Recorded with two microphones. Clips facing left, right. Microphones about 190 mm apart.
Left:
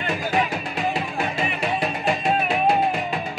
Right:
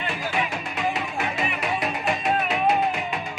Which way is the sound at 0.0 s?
40° left (ahead or behind).